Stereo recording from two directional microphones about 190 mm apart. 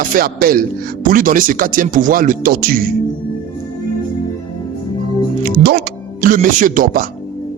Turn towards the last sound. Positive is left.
turn(degrees=-45)  # may be behind; listen again after turning